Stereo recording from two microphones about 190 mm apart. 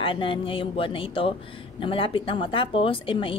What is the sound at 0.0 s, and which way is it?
A woman's voice, 25° left (ahead or behind).